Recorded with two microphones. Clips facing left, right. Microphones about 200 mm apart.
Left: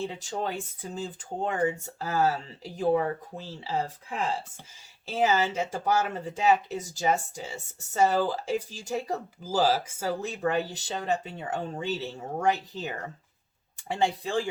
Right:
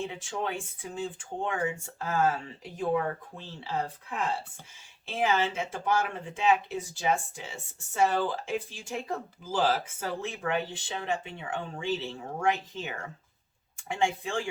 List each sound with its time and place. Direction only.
0.0 s speech: 35° left (ahead or behind)
5.0 s speech: 40° left (ahead or behind)